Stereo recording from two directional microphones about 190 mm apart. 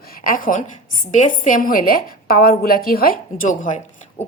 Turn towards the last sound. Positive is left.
turn(degrees=40)  # may be behind; listen again after turning